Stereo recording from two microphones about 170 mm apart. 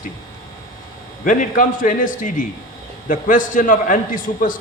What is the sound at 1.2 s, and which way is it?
A man's voice, 50° left (ahead or behind).